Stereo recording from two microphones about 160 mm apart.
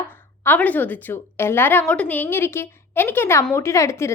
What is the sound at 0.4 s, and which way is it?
A woman's voice, 10° left (ahead or behind).